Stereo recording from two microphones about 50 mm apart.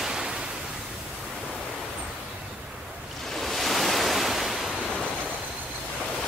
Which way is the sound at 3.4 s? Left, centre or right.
Centre.